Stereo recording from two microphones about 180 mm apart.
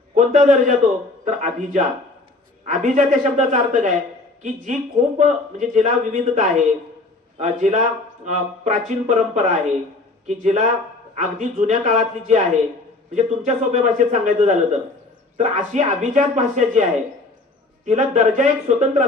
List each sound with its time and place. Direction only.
0.2 s a man's voice: 45° right (ahead or behind)
17.8 s a man's voice: 40° right (ahead or behind)